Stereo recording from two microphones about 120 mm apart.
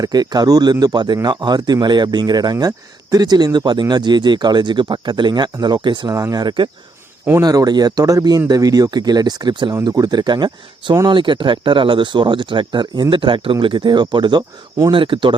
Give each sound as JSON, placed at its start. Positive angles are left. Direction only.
{"t": 0.0, "sound": "speech", "side_deg": -35}
{"t": 6.1, "sound": "speech", "side_deg": -30}